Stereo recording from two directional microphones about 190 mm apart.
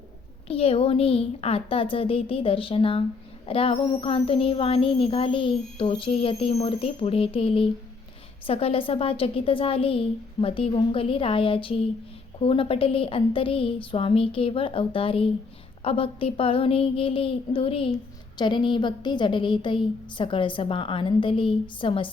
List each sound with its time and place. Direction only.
0.4 s a woman's voice: 30° left (ahead or behind)